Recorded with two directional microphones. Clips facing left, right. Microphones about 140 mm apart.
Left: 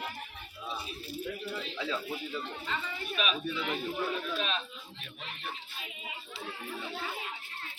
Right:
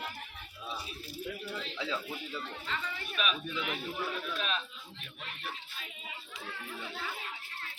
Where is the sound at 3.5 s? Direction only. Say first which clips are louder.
Left 3 dB; centre (ahead or behind).